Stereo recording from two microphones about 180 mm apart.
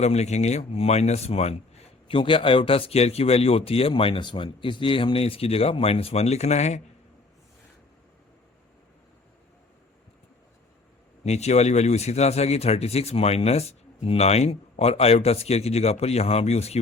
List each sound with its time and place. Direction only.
0.0 s a man's voice: 40° left (ahead or behind)
11.2 s a man's voice: 35° left (ahead or behind)